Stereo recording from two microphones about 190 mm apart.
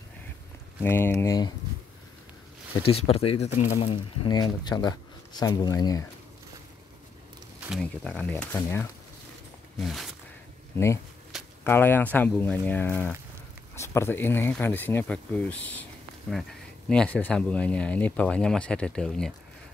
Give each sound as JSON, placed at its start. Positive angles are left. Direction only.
{"t": 0.8, "sound": "speech", "side_deg": 10}
{"t": 2.7, "sound": "speech", "side_deg": 30}
{"t": 7.8, "sound": "speech", "side_deg": 5}
{"t": 9.8, "sound": "speech", "side_deg": 0}
{"t": 11.6, "sound": "speech", "side_deg": 10}